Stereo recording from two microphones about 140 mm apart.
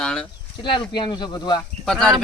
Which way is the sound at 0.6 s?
35° left (ahead or behind).